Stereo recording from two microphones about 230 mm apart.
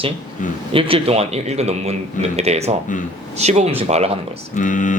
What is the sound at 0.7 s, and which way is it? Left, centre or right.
Speech, right.